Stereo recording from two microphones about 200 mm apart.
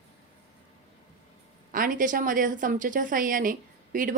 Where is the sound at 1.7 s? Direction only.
45° right (ahead or behind).